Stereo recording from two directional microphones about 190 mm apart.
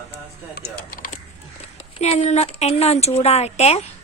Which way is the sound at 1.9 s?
35° left (ahead or behind).